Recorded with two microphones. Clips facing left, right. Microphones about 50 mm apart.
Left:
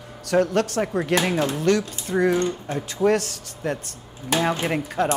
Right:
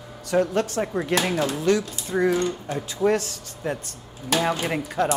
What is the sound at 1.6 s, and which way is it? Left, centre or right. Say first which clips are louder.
Speech: left 1 dB; left.